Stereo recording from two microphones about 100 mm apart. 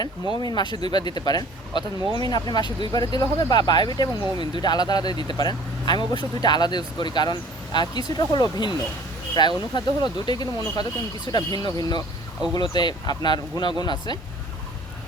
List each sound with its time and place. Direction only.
0.3 s speech: 45° left (ahead or behind)